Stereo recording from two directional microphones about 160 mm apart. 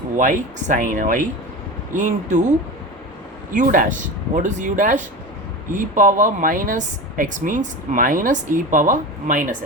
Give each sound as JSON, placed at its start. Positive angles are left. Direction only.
{"t": 0.2, "sound": "a woman's voice", "side_deg": -55}